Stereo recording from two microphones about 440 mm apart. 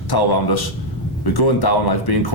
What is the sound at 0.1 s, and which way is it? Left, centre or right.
Speech, left.